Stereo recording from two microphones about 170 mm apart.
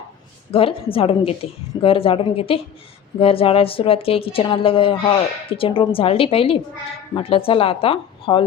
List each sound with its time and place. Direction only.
0.5 s a woman's voice: 35° left (ahead or behind)